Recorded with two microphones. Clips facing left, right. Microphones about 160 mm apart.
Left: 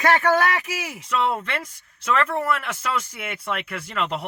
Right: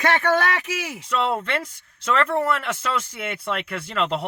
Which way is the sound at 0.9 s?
30° right (ahead or behind).